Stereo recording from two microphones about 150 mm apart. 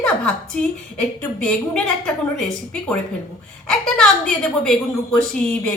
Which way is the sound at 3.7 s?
5° left (ahead or behind).